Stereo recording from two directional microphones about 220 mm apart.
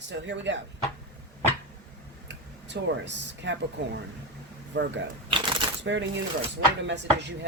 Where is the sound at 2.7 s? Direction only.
55° right (ahead or behind).